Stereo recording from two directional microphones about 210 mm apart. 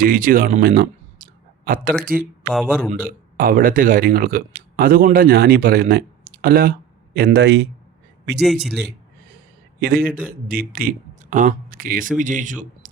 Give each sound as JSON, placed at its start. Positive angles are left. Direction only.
{"t": 0.0, "sound": "speech", "side_deg": -40}
{"t": 2.1, "sound": "speech", "side_deg": 0}
{"t": 3.3, "sound": "speech", "side_deg": -45}
{"t": 9.8, "sound": "a man's voice", "side_deg": -45}